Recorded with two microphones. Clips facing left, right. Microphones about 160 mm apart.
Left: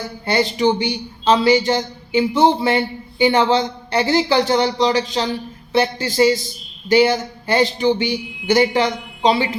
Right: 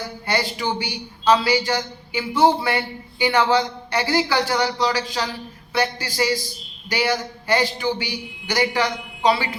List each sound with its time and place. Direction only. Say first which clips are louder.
0.3 s speech: left 7 dB; 20° left (ahead or behind)